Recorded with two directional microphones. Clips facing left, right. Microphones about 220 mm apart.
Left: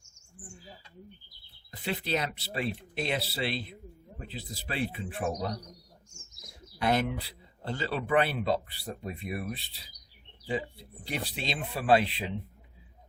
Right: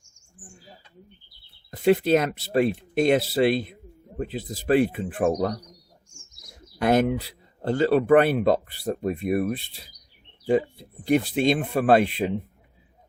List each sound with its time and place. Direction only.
1.7 s speech: 45° right (ahead or behind)
6.7 s speech: 45° right (ahead or behind)